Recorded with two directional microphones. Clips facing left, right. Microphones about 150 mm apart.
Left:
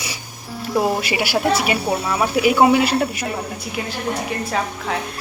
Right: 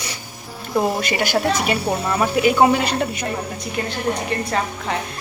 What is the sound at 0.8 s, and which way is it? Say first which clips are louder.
Speech: even; 5° left (ahead or behind).